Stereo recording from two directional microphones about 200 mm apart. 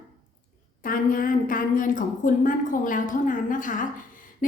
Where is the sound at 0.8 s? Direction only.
45° left (ahead or behind).